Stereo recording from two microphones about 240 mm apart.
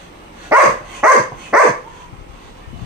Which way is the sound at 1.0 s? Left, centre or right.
Centre.